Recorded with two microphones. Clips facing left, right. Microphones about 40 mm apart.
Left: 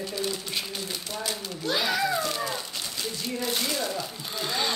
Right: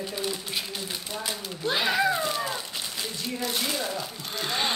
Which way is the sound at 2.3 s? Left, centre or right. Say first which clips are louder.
Right 1 dB; centre.